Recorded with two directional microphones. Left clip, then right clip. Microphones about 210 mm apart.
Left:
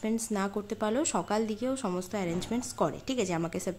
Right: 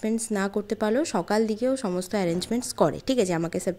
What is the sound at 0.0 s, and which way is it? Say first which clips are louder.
Speech: right 5 dB; 20° right (ahead or behind).